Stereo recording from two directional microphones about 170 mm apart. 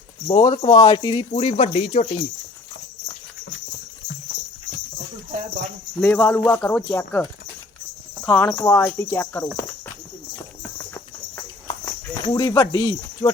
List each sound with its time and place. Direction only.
0.3 s speech: 30° left (ahead or behind)
6.0 s speech: 10° left (ahead or behind)
8.2 s speech: 5° left (ahead or behind)
10.8 s clip-clop: 15° left (ahead or behind)